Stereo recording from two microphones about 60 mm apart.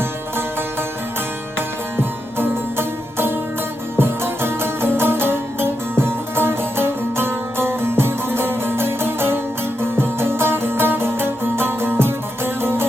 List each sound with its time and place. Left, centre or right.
1.5 s music: right